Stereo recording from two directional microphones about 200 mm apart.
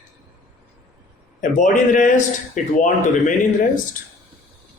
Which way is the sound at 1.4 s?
40° left (ahead or behind).